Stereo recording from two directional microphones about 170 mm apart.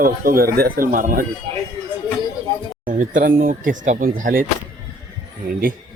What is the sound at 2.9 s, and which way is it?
Speech, 50° right (ahead or behind).